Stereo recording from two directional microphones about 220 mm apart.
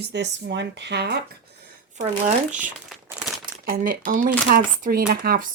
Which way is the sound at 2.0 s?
35° right (ahead or behind).